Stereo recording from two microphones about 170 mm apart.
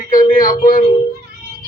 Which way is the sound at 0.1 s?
55° left (ahead or behind).